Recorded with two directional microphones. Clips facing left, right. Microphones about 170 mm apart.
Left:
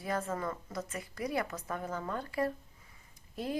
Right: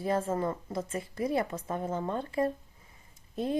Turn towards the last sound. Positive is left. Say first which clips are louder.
# right 5 dB
turn(degrees=-25)  # may be behind; listen again after turning